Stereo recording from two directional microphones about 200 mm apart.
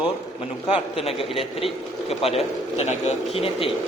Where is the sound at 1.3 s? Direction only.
30° left (ahead or behind).